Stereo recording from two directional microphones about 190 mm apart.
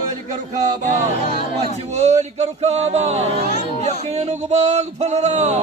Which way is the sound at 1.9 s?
35° right (ahead or behind).